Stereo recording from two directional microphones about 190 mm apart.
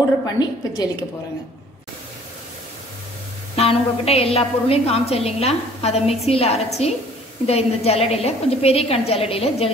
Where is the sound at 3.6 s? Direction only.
30° left (ahead or behind).